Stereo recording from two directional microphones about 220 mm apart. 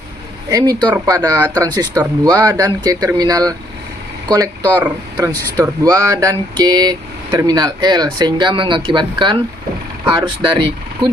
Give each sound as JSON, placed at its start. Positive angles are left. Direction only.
{"t": 0.5, "sound": "speech", "side_deg": -15}